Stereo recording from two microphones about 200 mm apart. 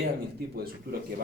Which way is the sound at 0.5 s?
50° right (ahead or behind).